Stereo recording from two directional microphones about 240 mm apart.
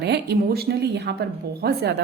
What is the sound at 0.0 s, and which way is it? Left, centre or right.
A woman's voice, right.